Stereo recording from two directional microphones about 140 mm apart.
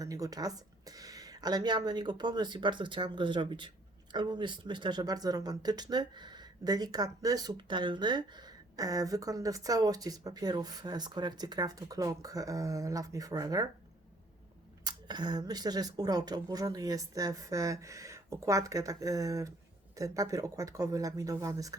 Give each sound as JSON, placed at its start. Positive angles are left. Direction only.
{"t": 0.0, "sound": "speech", "side_deg": -25}
{"t": 14.8, "sound": "speech", "side_deg": -30}